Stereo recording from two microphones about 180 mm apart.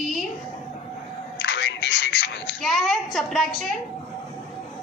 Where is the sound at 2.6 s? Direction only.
Centre (ahead or behind).